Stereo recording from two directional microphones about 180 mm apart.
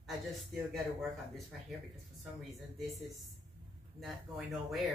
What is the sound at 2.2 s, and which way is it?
Speech, centre (ahead or behind).